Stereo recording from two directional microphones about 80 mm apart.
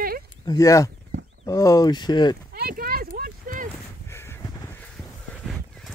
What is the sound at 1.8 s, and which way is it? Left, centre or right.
Speech, left.